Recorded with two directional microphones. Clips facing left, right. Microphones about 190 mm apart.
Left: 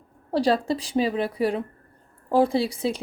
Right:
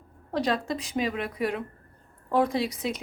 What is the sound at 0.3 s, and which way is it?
A woman's voice, 35° left (ahead or behind).